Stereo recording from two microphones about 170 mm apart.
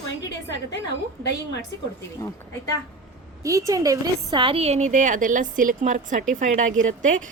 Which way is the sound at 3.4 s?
20° right (ahead or behind).